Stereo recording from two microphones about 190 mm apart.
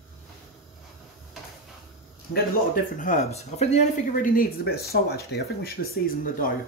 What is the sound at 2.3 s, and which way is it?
Speech, 45° left (ahead or behind).